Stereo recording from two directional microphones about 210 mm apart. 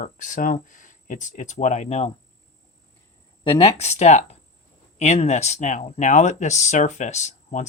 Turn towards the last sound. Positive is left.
turn(degrees=35)  # may be behind; listen again after turning